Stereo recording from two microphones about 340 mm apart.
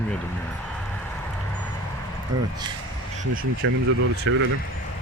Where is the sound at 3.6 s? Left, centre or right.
Right.